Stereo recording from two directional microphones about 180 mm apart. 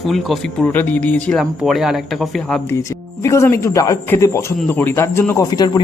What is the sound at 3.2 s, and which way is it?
Speech, 15° left (ahead or behind).